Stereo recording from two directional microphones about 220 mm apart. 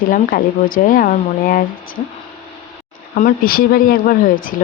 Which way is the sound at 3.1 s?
40° left (ahead or behind).